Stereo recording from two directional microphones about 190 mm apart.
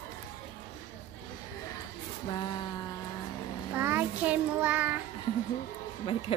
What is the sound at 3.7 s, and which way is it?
A child's voice, 10° right (ahead or behind).